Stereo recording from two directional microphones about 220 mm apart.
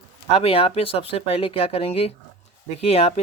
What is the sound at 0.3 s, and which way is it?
Speech, 25° left (ahead or behind).